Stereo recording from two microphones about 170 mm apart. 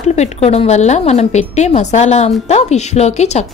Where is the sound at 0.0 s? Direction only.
40° left (ahead or behind).